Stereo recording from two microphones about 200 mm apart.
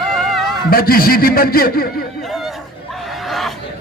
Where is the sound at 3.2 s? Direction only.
Centre (ahead or behind).